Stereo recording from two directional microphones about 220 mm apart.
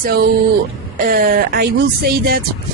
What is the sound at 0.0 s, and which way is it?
Speech, 45° right (ahead or behind).